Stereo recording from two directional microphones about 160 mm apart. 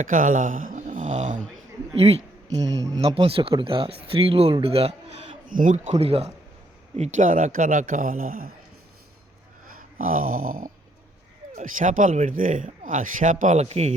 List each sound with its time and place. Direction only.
0.0 s speech: 55° right (ahead or behind)
2.0 s a sound: 40° right (ahead or behind)
2.7 s speech: 20° right (ahead or behind)
3.0 s a man's voice: 35° right (ahead or behind)
5.5 s a man's voice: 55° right (ahead or behind)
10.0 s a man's voice: 60° right (ahead or behind); by 13.9 s 40° right (ahead or behind)